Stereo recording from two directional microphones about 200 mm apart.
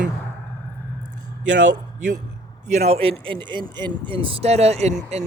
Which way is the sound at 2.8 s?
30° right (ahead or behind).